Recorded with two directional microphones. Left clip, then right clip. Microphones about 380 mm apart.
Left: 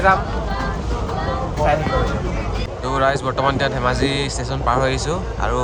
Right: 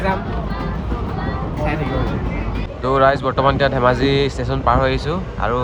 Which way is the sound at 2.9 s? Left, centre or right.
Centre.